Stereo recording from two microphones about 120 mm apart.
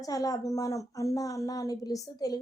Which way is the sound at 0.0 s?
30° left (ahead or behind).